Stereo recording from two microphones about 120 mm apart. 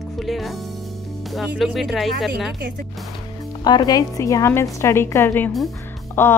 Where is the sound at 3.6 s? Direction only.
35° left (ahead or behind).